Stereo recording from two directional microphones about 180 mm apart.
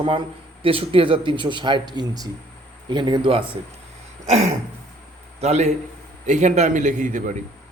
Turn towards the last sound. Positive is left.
turn(degrees=-45)  # may be behind; listen again after turning